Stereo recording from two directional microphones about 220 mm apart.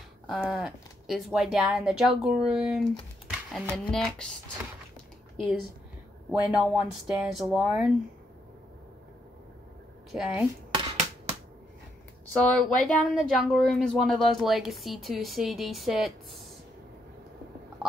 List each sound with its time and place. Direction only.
0.3 s speech: centre (ahead or behind)
5.4 s speech: centre (ahead or behind)
10.1 s speech: 5° right (ahead or behind)
12.4 s speech: centre (ahead or behind)